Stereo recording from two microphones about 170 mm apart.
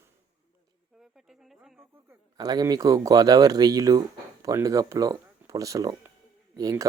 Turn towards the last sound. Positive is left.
turn(degrees=-20)  # may be behind; listen again after turning